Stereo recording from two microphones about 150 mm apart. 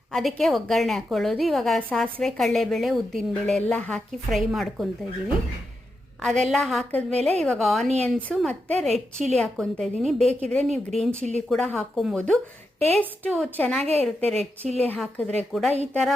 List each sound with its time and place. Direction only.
0.1 s a woman's voice: centre (ahead or behind)
6.4 s a woman's voice: centre (ahead or behind)